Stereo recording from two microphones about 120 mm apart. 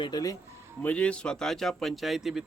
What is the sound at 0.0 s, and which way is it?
Speech, 35° left (ahead or behind).